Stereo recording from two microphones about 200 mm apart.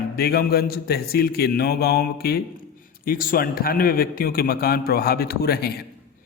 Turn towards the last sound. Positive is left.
turn(degrees=50)  # may be behind; listen again after turning